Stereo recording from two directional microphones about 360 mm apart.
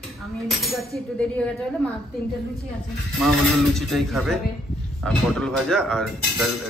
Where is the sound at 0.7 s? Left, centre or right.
Centre.